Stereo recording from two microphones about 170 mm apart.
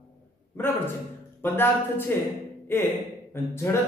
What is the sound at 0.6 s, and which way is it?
A woman's voice, 15° left (ahead or behind).